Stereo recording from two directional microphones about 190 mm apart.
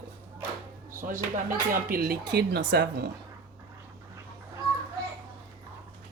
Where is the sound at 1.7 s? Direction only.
50° right (ahead or behind).